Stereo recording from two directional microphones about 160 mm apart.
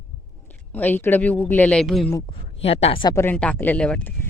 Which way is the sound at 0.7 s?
10° left (ahead or behind).